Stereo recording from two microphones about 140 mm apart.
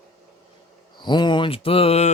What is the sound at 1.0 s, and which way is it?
Speech, 30° left (ahead or behind).